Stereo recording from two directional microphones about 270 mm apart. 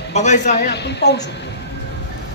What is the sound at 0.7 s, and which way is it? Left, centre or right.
Speech, left.